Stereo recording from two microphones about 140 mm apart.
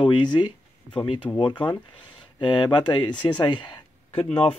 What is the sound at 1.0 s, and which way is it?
Speech, 40° left (ahead or behind).